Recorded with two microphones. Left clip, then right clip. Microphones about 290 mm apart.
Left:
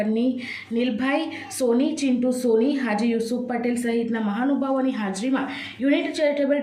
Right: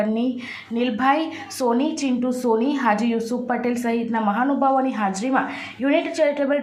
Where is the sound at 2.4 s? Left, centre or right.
Centre.